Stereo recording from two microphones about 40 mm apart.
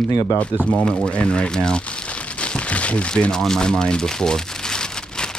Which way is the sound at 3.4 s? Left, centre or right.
Centre.